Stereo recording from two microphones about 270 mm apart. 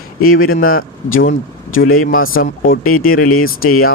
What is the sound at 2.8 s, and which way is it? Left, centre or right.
Speech, left.